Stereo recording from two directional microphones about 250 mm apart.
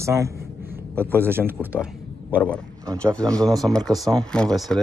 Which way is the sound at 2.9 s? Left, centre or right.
Centre.